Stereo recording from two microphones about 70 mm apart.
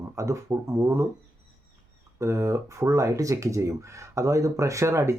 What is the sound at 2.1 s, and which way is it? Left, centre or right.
Speech, right.